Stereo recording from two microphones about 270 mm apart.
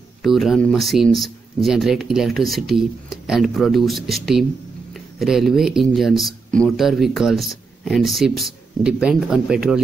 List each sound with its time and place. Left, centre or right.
0.2 s speech: centre